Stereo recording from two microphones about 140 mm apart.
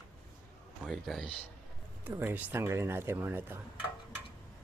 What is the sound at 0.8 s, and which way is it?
Speech, centre (ahead or behind).